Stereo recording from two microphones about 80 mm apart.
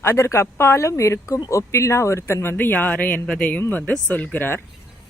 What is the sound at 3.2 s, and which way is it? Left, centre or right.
Speech, centre.